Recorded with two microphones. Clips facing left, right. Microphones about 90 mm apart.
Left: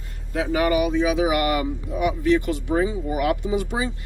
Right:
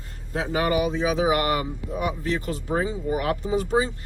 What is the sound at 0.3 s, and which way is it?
Speech, 30° right (ahead or behind).